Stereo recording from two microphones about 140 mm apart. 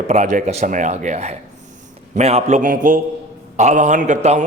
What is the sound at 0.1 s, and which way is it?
A man's voice, 55° right (ahead or behind).